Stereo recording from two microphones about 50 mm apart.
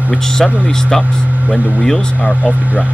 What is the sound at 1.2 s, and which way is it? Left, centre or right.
Vehicle, right.